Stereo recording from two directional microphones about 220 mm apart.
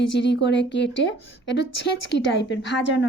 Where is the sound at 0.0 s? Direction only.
55° left (ahead or behind).